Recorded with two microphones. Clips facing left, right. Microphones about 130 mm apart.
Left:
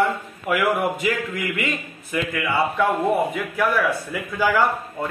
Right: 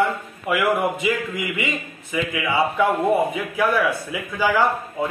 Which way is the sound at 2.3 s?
10° right (ahead or behind).